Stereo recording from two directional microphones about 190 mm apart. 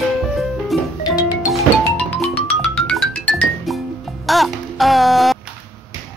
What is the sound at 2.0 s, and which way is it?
Music, 5° left (ahead or behind).